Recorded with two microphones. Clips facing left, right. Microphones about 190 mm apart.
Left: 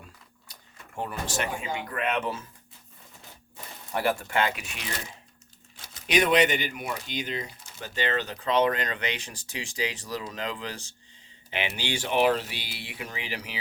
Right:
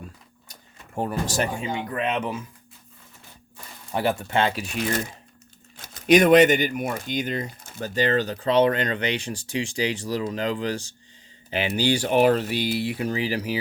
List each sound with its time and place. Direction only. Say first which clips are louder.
0.9 s speech: right 6 dB; 40° right (ahead or behind)
1.7 s speech: right 3 dB; 20° right (ahead or behind)
3.9 s speech: right 3 dB; 20° right (ahead or behind)